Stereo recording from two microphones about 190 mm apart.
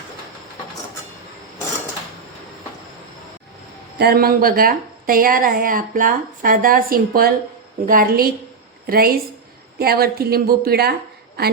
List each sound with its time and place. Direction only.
3.9 s a woman's voice: 55° right (ahead or behind)